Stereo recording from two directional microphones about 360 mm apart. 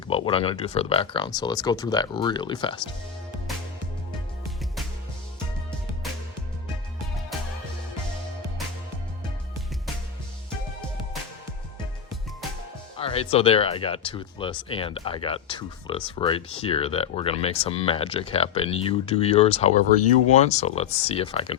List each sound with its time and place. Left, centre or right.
0.1 s speech: centre
13.0 s speech: centre